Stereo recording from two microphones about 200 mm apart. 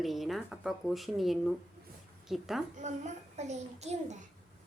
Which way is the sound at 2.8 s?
35° right (ahead or behind).